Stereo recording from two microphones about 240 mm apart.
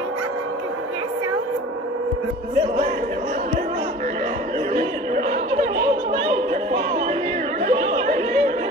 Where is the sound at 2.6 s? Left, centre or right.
Right.